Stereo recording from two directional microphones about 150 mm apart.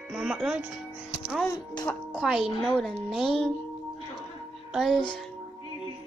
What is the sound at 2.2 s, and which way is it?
Music, 5° right (ahead or behind).